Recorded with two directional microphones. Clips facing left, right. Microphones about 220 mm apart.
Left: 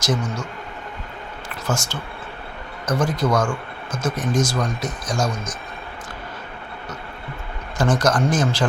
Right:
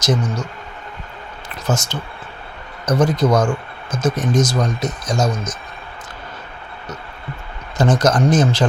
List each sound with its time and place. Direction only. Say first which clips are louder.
0.0 s speech: right 4 dB; 20° right (ahead or behind)
1.6 s speech: right 4 dB; 20° right (ahead or behind)
7.8 s speech: right 3 dB; 20° right (ahead or behind)